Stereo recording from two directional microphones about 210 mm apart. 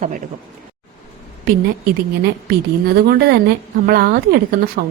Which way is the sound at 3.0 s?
50° right (ahead or behind).